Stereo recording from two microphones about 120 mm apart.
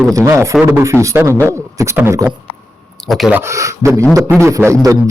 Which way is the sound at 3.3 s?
25° right (ahead or behind).